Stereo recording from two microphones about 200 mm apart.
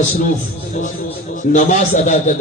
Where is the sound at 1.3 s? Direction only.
35° left (ahead or behind).